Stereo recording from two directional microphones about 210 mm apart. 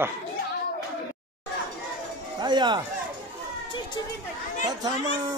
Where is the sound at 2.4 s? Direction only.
20° right (ahead or behind).